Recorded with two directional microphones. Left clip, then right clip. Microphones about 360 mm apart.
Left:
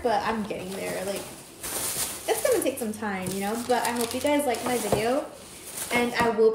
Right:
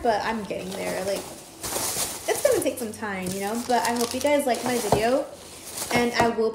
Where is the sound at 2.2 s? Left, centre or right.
Centre.